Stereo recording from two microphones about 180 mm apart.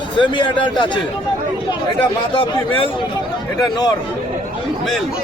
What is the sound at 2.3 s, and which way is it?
Speech, 30° left (ahead or behind).